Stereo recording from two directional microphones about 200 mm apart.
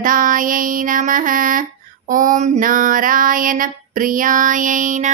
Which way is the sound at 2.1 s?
40° right (ahead or behind).